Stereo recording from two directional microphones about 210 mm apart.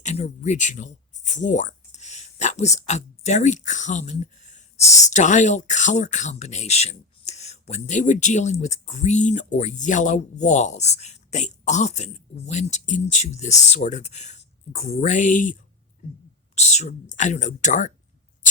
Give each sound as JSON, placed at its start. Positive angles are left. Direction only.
{"t": 0.0, "sound": "speech", "side_deg": 35}
{"t": 16.6, "sound": "speech", "side_deg": 30}